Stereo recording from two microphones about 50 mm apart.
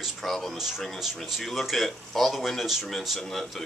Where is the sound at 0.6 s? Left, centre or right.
Centre.